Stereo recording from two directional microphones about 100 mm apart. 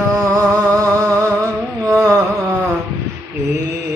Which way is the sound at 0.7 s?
30° right (ahead or behind).